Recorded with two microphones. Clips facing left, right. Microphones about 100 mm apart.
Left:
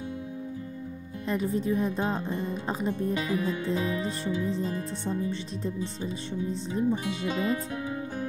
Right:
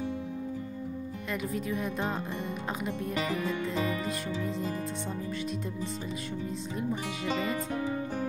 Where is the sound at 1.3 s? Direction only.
30° left (ahead or behind).